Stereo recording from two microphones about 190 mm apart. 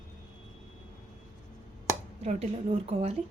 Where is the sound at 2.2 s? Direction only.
35° right (ahead or behind).